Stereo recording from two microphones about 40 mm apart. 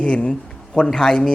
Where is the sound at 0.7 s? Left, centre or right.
Centre.